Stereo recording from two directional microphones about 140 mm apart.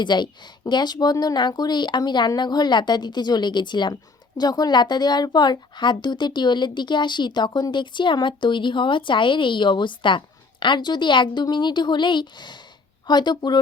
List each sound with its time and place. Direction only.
0.0 s speech: 30° left (ahead or behind)